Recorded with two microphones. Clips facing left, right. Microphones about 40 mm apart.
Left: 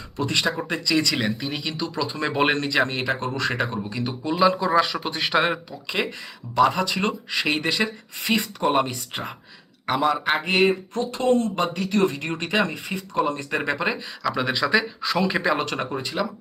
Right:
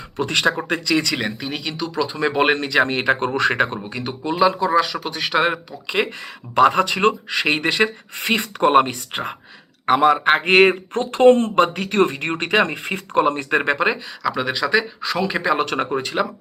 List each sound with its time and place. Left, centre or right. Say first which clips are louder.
0.2 s speech: right 4 dB; right
0.9 s speech: even; centre
2.8 s speech: right 4 dB; right
3.1 s speech: right 6 dB; right
3.9 s speech: right 2 dB; centre
4.4 s speech: right 2 dB; centre
6.6 s speech: right 5 dB; right
10.3 s speech: right 7 dB; right
10.9 s speech: right 8 dB; right
13.5 s speech: right 6 dB; right
13.9 s speech: right 2 dB; centre
15.7 s speech: right 5 dB; right